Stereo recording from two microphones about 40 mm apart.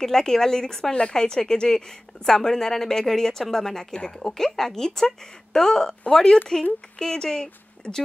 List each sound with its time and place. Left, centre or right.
0.0 s a woman's voice: centre
7.0 s speech: centre